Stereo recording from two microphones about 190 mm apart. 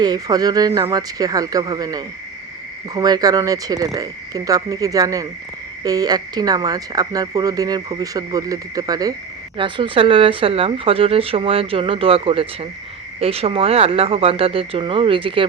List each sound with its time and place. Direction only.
0.0 s speech: 20° right (ahead or behind)